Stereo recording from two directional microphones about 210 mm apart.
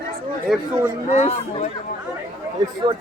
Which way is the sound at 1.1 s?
30° left (ahead or behind).